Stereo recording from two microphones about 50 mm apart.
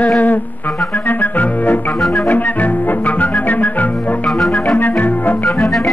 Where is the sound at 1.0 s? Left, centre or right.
Left.